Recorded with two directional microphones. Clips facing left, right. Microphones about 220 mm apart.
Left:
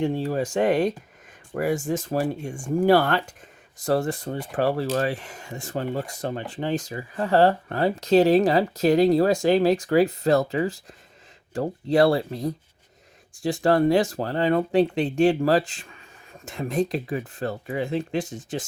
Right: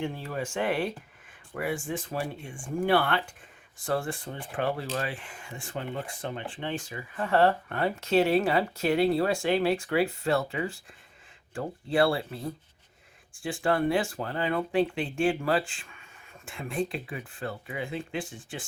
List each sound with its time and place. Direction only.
0.0 s speech: 35° left (ahead or behind)